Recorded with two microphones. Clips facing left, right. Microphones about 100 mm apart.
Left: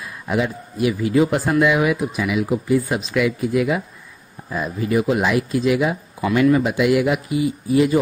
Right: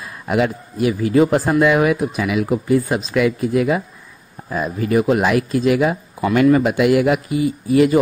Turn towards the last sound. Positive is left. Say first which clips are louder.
# right 3 dB
turn(degrees=-55)  # may be behind; listen again after turning